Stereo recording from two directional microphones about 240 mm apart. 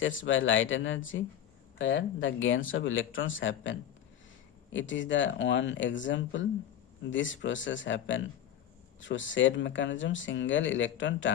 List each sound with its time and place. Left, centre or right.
0.0 s speech: left